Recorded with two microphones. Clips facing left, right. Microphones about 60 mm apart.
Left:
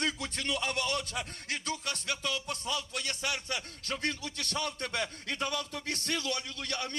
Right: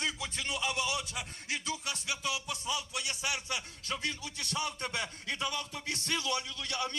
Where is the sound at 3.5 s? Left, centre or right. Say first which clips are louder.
Left 1 dB; left.